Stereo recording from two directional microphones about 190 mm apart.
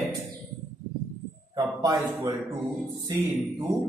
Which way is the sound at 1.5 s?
20° right (ahead or behind).